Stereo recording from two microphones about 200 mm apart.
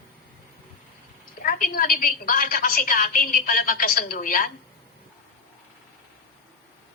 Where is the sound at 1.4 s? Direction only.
45° left (ahead or behind).